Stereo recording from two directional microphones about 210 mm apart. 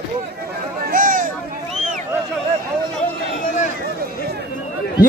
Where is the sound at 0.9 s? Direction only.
40° right (ahead or behind).